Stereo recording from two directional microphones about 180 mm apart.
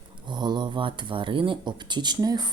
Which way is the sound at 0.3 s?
25° right (ahead or behind).